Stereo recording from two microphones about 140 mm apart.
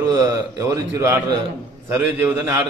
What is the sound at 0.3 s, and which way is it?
A man's voice, 25° right (ahead or behind).